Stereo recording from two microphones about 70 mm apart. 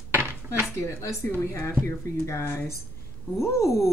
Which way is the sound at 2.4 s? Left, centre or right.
Left.